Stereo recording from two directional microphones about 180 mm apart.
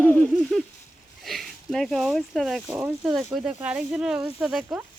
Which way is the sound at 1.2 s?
Centre (ahead or behind).